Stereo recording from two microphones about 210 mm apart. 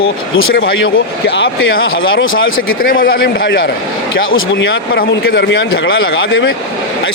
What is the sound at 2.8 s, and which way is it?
Speech, 45° left (ahead or behind).